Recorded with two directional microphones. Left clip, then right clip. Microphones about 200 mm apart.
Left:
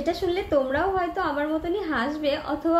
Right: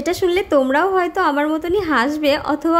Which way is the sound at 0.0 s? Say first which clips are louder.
Right 7 dB; 50° right (ahead or behind).